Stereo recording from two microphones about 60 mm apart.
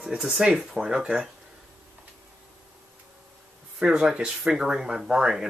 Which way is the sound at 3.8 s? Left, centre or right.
Centre.